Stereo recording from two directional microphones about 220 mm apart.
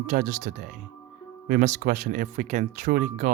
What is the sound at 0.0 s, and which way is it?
Speech, 35° right (ahead or behind).